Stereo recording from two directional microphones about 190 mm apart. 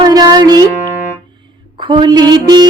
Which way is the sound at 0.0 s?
20° right (ahead or behind).